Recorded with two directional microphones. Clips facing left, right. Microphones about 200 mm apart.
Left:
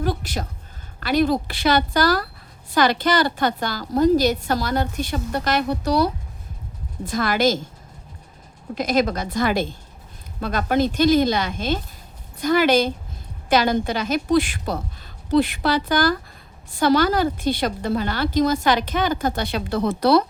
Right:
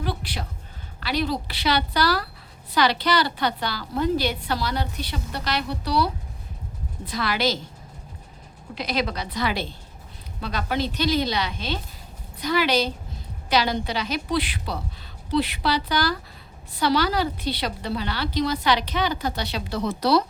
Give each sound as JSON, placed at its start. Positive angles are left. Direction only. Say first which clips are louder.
{"t": 0.0, "sound": "a sound", "louder": "left 5 dB", "side_deg": 45}
{"t": 0.9, "sound": "a woman's voice", "louder": "left 7 dB", "side_deg": 50}
{"t": 8.7, "sound": "a woman's voice", "louder": "left 6 dB", "side_deg": 45}